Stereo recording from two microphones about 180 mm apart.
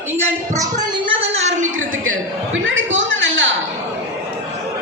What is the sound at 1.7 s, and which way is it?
Speech, 90° right.